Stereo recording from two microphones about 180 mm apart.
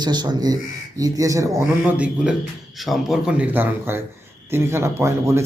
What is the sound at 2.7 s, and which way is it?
A man's voice, centre (ahead or behind).